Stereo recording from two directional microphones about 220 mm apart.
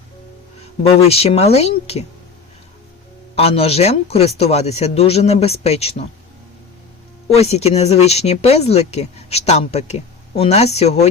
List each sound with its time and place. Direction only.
0.8 s speech: 30° left (ahead or behind)
3.3 s speech: 25° left (ahead or behind)
7.3 s speech: 30° left (ahead or behind)